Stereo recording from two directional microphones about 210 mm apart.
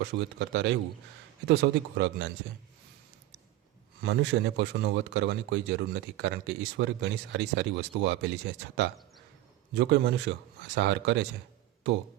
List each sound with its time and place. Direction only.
0.0 s speech: 60° right (ahead or behind)
4.0 s speech: 55° right (ahead or behind)